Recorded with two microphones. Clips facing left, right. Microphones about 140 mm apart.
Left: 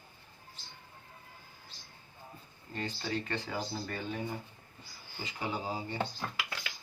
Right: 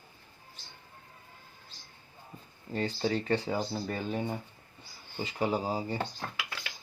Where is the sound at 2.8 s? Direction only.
35° right (ahead or behind).